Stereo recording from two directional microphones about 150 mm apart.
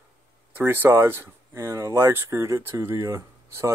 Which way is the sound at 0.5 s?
15° right (ahead or behind).